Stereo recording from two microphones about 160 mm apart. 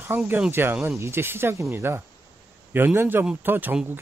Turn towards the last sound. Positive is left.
turn(degrees=-10)  # may be behind; listen again after turning